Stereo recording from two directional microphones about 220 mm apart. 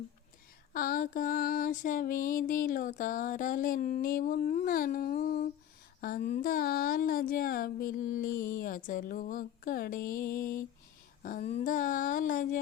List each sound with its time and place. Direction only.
0.7 s female singing: 40° left (ahead or behind)